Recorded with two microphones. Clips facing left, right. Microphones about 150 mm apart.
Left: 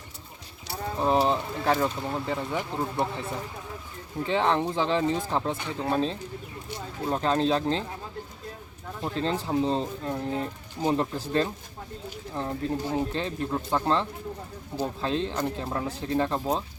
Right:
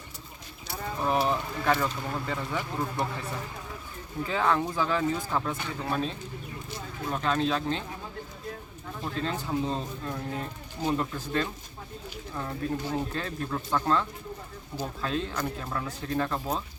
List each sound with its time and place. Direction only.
0.7 s speech: 25° left (ahead or behind)
9.0 s speech: 30° left (ahead or behind)